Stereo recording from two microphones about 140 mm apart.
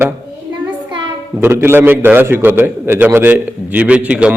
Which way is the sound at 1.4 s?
15° right (ahead or behind).